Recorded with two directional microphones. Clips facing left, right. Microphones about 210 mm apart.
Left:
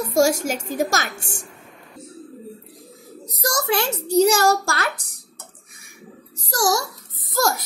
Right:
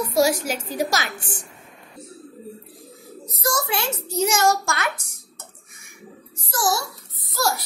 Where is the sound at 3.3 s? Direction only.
75° left (ahead or behind).